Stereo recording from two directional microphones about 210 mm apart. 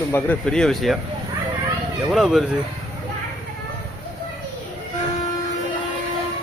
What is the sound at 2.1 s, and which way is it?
Speech, centre (ahead or behind).